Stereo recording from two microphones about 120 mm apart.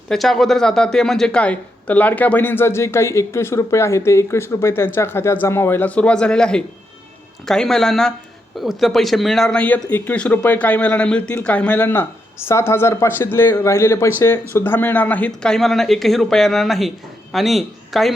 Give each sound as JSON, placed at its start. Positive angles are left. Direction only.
{"t": 0.1, "sound": "a man's voice", "side_deg": 0}